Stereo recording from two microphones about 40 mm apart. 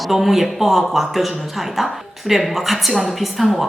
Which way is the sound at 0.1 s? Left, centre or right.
Centre.